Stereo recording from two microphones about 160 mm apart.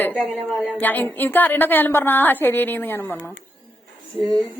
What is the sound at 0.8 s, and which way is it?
A woman's voice, 10° left (ahead or behind).